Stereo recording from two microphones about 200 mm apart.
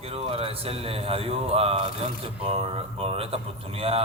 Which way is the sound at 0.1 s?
30° right (ahead or behind).